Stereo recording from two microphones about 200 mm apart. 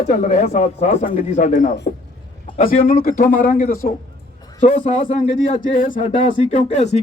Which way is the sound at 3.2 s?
45° left (ahead or behind).